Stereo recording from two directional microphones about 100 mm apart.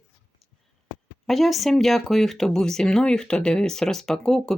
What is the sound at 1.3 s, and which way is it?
Speech, centre (ahead or behind).